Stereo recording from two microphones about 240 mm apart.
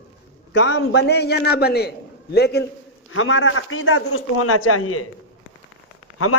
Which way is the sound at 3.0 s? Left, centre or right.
Left.